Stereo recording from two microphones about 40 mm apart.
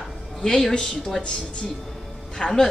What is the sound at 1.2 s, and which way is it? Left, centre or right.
Speech, left.